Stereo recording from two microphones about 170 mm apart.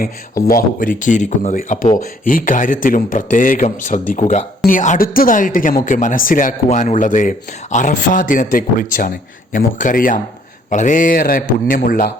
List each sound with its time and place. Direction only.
0.4 s a man's voice: 55° left (ahead or behind)